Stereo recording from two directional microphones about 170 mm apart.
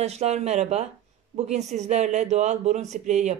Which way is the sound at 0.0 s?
40° right (ahead or behind).